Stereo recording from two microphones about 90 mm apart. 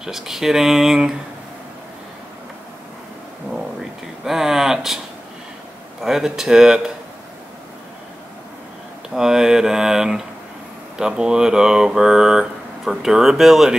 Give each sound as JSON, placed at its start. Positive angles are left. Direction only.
{"t": 0.0, "sound": "speech", "side_deg": -5}
{"t": 4.2, "sound": "a sound", "side_deg": -5}
{"t": 5.9, "sound": "speech", "side_deg": -5}
{"t": 9.1, "sound": "speech", "side_deg": -5}